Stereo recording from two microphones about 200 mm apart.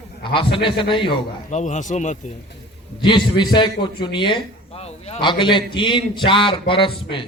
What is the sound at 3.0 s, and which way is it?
A man's voice, 25° left (ahead or behind).